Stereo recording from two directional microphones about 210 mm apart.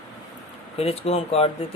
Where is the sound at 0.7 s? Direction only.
30° left (ahead or behind).